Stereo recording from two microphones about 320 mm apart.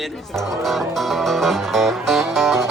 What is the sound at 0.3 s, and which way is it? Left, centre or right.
Music, centre.